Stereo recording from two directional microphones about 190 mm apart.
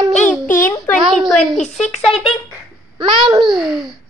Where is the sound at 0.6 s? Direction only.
10° left (ahead or behind).